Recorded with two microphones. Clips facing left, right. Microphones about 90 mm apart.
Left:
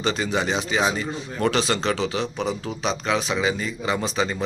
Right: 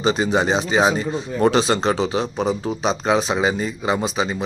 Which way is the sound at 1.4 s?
25° right (ahead or behind).